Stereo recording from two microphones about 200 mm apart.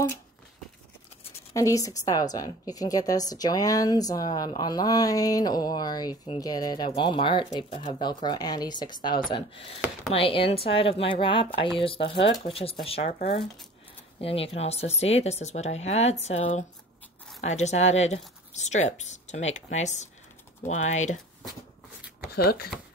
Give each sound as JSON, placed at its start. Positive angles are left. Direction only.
{"t": 1.5, "sound": "a woman's voice", "side_deg": 15}
{"t": 22.3, "sound": "speech", "side_deg": 50}